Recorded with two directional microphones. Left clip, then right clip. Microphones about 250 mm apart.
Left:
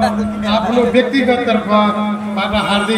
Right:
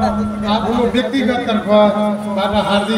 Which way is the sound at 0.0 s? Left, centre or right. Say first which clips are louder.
Left 2 dB; left.